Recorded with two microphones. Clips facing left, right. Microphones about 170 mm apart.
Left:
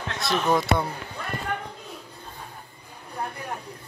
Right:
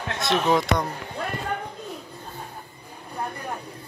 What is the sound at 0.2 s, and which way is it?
Speech, centre (ahead or behind).